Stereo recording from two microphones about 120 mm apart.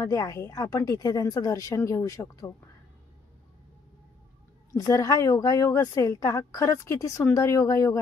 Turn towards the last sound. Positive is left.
turn(degrees=25)  # may be behind; listen again after turning